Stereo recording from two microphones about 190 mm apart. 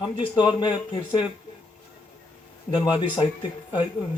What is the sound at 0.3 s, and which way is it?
Speech, 20° left (ahead or behind).